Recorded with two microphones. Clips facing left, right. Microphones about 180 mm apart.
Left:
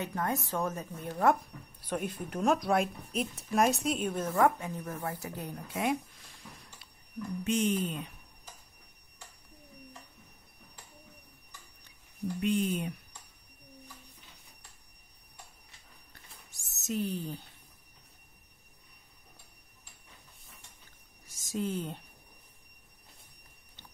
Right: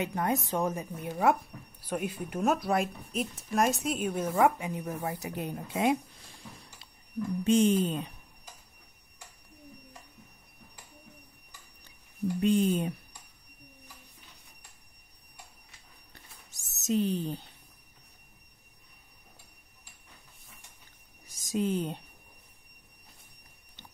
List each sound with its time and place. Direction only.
0.0 s a woman's voice: 20° right (ahead or behind)
7.4 s speech: 30° right (ahead or behind)
12.4 s speech: 35° right (ahead or behind)
16.8 s speech: 20° right (ahead or behind)
21.5 s speech: 20° right (ahead or behind)